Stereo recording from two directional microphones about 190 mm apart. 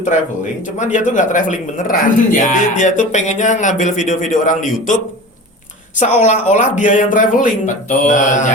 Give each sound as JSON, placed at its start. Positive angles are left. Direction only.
{"t": 0.8, "sound": "speech", "side_deg": 40}
{"t": 6.0, "sound": "speech", "side_deg": 40}